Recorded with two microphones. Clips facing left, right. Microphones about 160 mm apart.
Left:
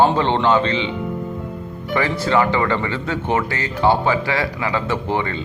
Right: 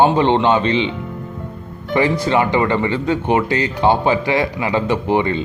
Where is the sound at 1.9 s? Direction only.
20° right (ahead or behind).